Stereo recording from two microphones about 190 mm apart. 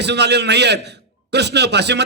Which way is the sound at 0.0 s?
65° right (ahead or behind).